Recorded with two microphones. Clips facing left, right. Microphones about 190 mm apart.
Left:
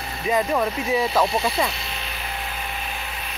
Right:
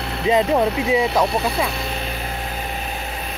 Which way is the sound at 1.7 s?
55° right (ahead or behind).